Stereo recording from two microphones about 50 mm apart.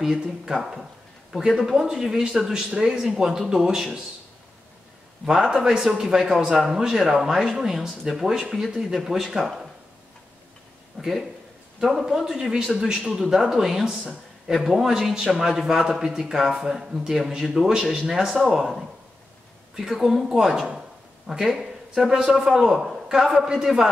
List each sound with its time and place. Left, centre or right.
0.0 s a man's voice: centre
5.2 s a man's voice: centre
11.0 s a man's voice: centre
19.9 s a man's voice: centre